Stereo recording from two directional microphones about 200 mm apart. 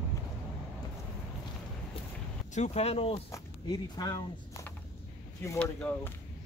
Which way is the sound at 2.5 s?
35° left (ahead or behind).